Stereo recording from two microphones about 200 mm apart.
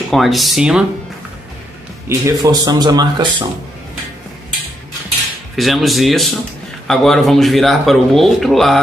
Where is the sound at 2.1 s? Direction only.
20° right (ahead or behind).